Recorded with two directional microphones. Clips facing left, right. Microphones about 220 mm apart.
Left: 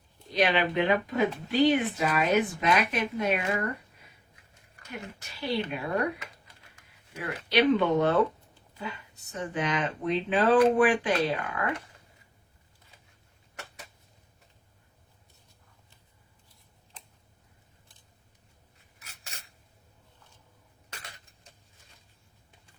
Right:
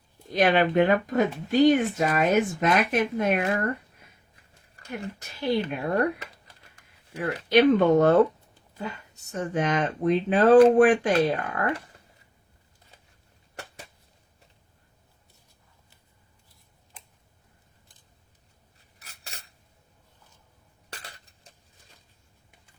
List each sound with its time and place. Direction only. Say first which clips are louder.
0.3 s speech: right 4 dB; 50° right (ahead or behind)
4.9 s speech: right 6 dB; 50° right (ahead or behind)
7.2 s speech: right 6 dB; 45° right (ahead or behind)
18.9 s scissors: right 3 dB; 35° right (ahead or behind)